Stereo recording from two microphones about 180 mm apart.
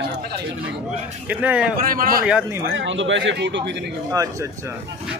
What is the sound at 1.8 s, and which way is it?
Speech, 50° right (ahead or behind).